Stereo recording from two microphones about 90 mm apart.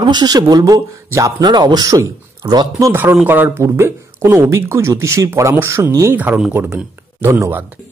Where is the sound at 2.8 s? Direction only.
25° right (ahead or behind).